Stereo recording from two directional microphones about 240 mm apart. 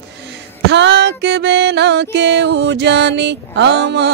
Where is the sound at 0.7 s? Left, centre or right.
Right.